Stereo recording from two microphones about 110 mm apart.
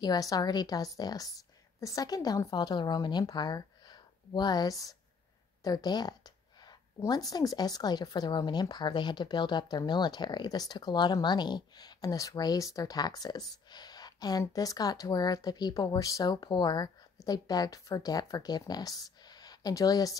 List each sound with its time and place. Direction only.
0.0 s a woman's voice: 35° left (ahead or behind)
5.6 s a sound: 35° left (ahead or behind)
7.0 s speech: 35° left (ahead or behind)